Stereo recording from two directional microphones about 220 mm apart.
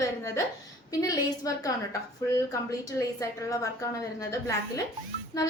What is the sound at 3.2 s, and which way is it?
A woman's voice, 15° left (ahead or behind).